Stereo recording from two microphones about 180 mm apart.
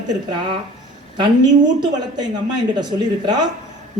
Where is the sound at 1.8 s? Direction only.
25° right (ahead or behind).